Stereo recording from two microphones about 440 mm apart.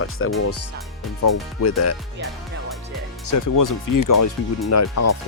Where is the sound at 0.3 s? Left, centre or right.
Left.